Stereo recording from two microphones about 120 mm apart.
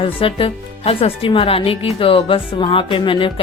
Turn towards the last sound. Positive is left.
turn(degrees=45)  # may be behind; listen again after turning